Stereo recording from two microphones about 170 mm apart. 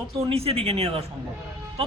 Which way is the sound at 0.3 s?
35° right (ahead or behind).